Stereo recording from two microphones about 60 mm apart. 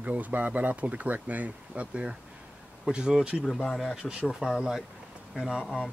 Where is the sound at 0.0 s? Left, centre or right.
Right.